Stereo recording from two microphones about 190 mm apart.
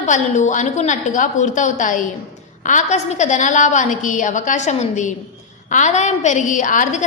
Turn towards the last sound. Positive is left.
turn(degrees=40)  # may be behind; listen again after turning